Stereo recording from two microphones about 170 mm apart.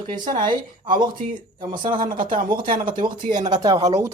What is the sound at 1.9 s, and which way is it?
Speech, 55° right (ahead or behind).